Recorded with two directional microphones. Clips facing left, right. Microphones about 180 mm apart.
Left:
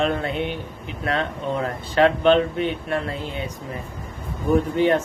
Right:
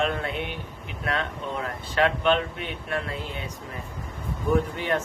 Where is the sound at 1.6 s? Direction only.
30° left (ahead or behind).